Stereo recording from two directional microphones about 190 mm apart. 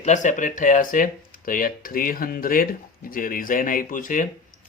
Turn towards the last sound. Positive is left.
turn(degrees=45)  # may be behind; listen again after turning